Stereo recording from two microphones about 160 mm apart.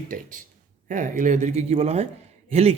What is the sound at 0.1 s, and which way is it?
Speech, 60° right (ahead or behind).